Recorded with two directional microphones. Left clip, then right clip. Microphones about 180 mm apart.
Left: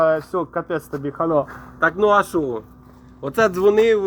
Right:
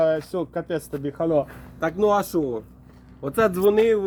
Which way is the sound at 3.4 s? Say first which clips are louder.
Left 3 dB; 50° right (ahead or behind).